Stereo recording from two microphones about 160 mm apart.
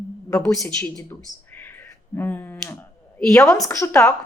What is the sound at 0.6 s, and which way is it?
Speech, 5° left (ahead or behind).